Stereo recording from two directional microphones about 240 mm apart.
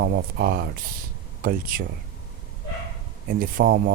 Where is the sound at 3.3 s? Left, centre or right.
Right.